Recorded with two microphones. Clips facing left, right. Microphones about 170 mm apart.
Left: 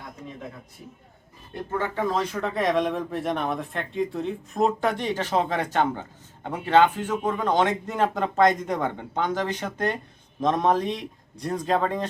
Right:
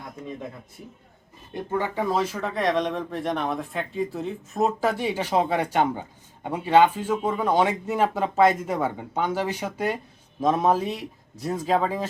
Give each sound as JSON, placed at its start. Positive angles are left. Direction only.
{"t": 1.5, "sound": "speech", "side_deg": -15}